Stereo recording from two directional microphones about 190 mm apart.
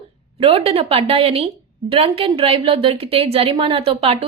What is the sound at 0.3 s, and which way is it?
A woman's voice, 30° right (ahead or behind).